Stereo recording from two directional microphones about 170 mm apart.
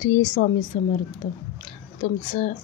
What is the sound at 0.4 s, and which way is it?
Speech, 50° left (ahead or behind).